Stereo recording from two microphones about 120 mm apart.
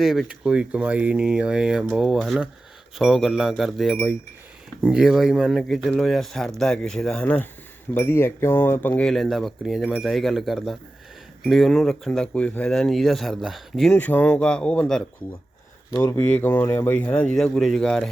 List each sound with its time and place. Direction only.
0.0 s speech: centre (ahead or behind); by 9.0 s 15° left (ahead or behind)
9.0 s speech: centre (ahead or behind)
13.9 s speech: 15° left (ahead or behind)